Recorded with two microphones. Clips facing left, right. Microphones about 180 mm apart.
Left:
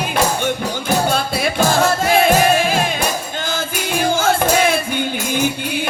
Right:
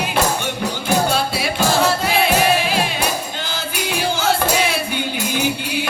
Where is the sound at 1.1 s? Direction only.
50° left (ahead or behind).